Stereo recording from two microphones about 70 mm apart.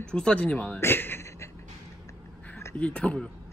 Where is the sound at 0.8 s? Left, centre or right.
Left.